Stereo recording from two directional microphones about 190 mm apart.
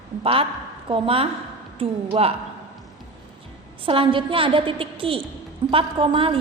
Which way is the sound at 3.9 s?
30° right (ahead or behind).